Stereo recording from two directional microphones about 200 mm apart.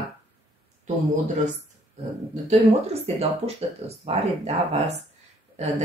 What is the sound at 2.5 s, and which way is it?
Speech, 30° right (ahead or behind).